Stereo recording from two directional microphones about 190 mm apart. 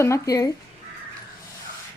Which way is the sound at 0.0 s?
15° left (ahead or behind).